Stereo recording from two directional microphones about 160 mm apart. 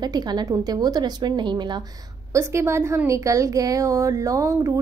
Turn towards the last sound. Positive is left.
turn(degrees=-20)  # may be behind; listen again after turning